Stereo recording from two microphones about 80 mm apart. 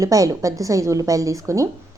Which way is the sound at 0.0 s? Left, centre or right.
Right.